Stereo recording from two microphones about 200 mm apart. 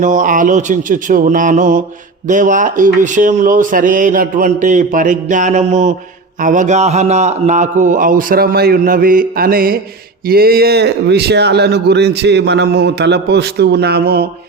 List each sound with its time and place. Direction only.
0.0 s speech: 40° right (ahead or behind)